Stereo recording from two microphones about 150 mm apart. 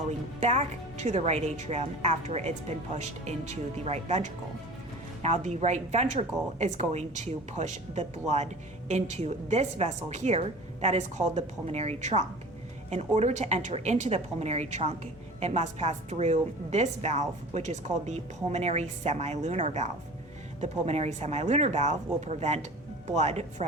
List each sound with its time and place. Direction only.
0.3 s a woman's voice: 50° right (ahead or behind)